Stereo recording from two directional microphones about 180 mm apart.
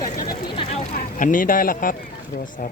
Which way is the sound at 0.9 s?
45° left (ahead or behind).